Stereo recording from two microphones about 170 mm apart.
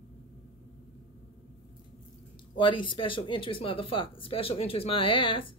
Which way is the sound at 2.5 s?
30° left (ahead or behind).